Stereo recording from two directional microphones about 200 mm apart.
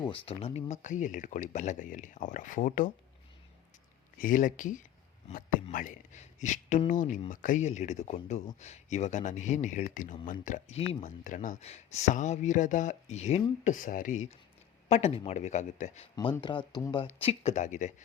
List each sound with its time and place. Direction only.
0.0 s speech: 30° left (ahead or behind)
4.2 s speech: 40° left (ahead or behind)
16.1 s speech: 20° left (ahead or behind); by 17.9 s 40° left (ahead or behind)